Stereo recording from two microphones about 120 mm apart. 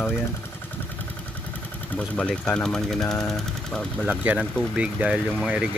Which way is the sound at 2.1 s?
5° left (ahead or behind).